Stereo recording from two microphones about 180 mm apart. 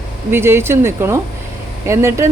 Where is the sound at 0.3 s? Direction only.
15° right (ahead or behind).